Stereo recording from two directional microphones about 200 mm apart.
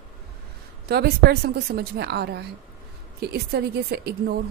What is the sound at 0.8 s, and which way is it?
Speech, 50° right (ahead or behind).